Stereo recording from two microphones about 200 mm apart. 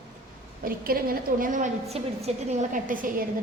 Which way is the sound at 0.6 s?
45° right (ahead or behind).